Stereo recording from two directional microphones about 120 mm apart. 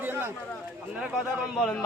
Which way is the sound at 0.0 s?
20° right (ahead or behind).